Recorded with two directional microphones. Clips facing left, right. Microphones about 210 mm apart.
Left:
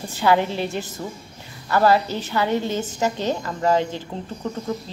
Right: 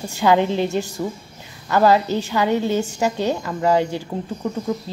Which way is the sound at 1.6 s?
15° right (ahead or behind).